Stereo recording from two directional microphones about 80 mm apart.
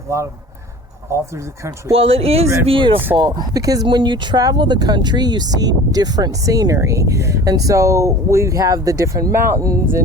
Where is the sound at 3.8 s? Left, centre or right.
Right.